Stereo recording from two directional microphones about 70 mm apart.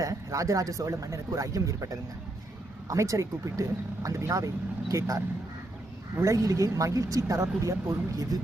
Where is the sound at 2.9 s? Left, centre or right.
Right.